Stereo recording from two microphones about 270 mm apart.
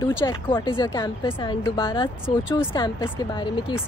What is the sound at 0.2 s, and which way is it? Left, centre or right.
A woman's voice, centre.